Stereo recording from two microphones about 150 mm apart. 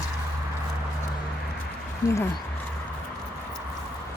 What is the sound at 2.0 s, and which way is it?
Speech, 20° left (ahead or behind).